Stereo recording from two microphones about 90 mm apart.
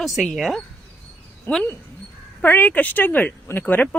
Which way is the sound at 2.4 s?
20° left (ahead or behind).